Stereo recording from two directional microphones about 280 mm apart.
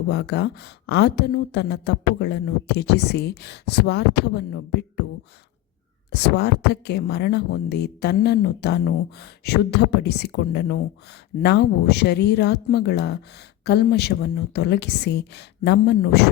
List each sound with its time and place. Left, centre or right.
0.1 s speech: left
6.1 s speech: left